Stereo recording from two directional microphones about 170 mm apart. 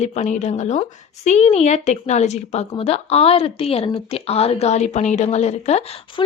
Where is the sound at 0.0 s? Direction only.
40° left (ahead or behind).